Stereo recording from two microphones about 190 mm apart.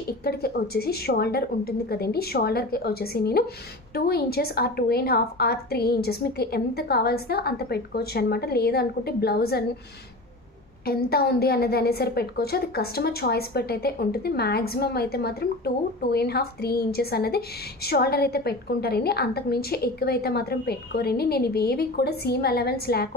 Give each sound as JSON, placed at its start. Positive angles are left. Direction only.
{"t": 0.2, "sound": "a woman's voice", "side_deg": 55}
{"t": 10.9, "sound": "a woman's voice", "side_deg": 55}